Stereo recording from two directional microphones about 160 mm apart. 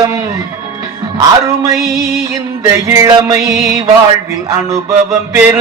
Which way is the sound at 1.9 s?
20° right (ahead or behind).